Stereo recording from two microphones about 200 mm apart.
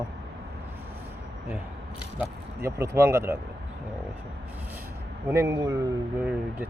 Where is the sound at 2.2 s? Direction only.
15° right (ahead or behind).